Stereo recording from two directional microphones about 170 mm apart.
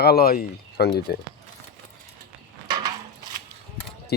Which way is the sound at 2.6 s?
25° right (ahead or behind).